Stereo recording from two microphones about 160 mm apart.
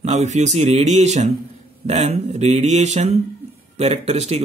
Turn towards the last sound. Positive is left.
turn(degrees=-40)  # may be behind; listen again after turning